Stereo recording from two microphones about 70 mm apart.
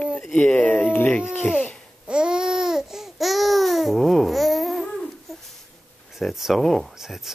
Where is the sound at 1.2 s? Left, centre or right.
Centre.